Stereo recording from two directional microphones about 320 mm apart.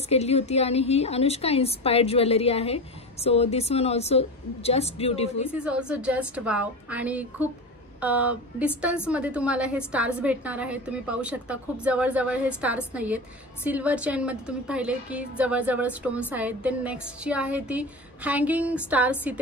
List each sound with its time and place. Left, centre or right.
0.1 s a woman's voice: centre
5.5 s a woman's voice: centre